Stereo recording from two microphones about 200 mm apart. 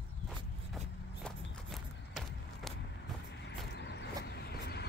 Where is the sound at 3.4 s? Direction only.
60° left (ahead or behind).